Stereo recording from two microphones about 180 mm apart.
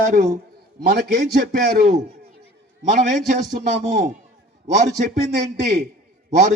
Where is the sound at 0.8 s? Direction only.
65° right (ahead or behind).